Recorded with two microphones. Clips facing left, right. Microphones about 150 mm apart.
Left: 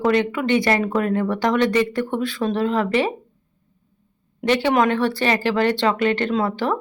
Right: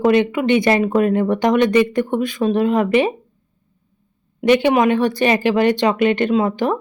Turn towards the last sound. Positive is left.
turn(degrees=-15)  # may be behind; listen again after turning